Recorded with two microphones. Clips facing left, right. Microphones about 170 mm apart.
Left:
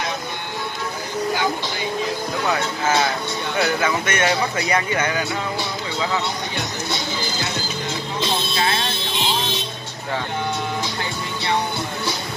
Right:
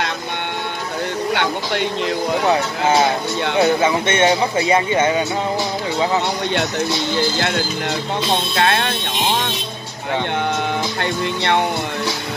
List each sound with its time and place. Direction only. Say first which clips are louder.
1.3 s speech: right 3 dB; 70° right (ahead or behind)
2.4 s speech: right 3 dB; 30° right (ahead or behind)
7.3 s speech: right 6 dB; 60° right (ahead or behind)
11.0 s speech: right 7 dB; 65° right (ahead or behind)